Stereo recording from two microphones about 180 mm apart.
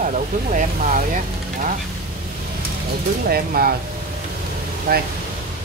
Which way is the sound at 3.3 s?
55° right (ahead or behind).